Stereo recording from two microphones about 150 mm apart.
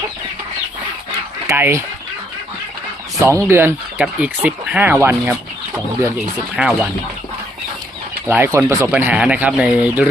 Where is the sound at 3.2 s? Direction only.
20° right (ahead or behind).